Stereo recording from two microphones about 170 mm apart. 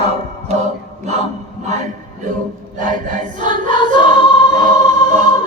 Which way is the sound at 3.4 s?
30° left (ahead or behind).